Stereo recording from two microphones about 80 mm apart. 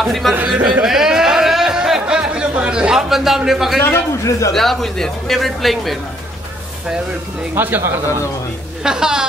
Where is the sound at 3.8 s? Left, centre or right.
Left.